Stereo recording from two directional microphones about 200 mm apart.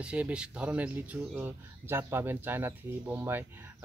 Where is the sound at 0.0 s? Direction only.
5° right (ahead or behind).